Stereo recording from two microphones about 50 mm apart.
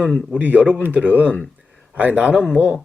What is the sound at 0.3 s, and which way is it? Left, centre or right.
Speech, right.